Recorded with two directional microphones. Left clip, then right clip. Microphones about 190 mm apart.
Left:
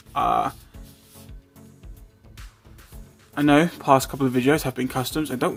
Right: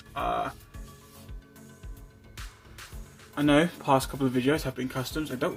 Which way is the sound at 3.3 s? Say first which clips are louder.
Left 5 dB; 35° left (ahead or behind).